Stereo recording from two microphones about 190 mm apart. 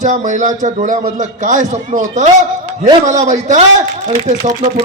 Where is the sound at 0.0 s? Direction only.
40° right (ahead or behind).